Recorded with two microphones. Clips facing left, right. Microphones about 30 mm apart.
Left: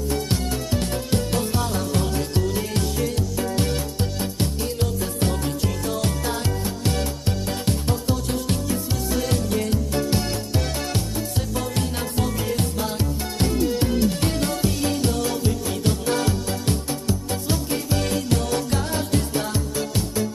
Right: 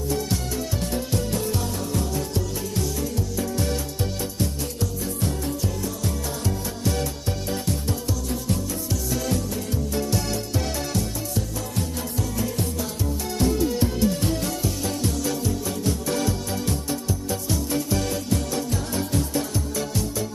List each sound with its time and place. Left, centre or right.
0.3 s music: left